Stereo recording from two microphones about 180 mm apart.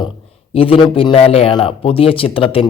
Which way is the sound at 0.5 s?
30° left (ahead or behind).